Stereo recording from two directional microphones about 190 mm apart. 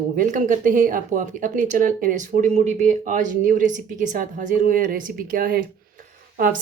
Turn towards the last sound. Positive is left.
turn(degrees=-45)  # may be behind; listen again after turning